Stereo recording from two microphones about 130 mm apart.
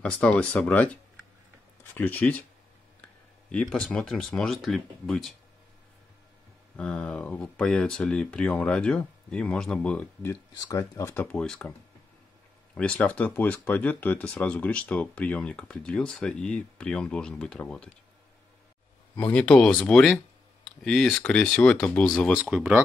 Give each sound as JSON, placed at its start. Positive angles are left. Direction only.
{"t": 0.0, "sound": "speech", "side_deg": 10}
{"t": 3.5, "sound": "speech", "side_deg": 5}
{"t": 6.8, "sound": "speech", "side_deg": 10}
{"t": 10.6, "sound": "speech", "side_deg": 25}
{"t": 11.1, "sound": "speech", "side_deg": 5}
{"t": 12.7, "sound": "speech", "side_deg": 10}
{"t": 19.1, "sound": "speech", "side_deg": 10}
{"t": 22.4, "sound": "speech", "side_deg": -10}